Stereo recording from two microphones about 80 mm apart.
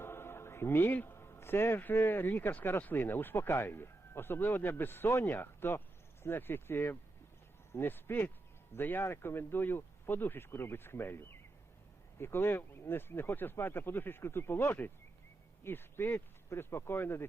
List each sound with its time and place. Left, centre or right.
0.0 s a man's voice: left